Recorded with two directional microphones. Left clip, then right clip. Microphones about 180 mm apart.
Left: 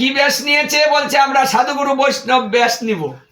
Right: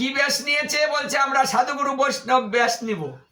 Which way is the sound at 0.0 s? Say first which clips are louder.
Left 7 dB; 25° right (ahead or behind).